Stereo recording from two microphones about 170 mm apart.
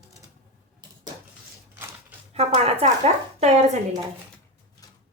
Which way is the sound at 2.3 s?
35° right (ahead or behind).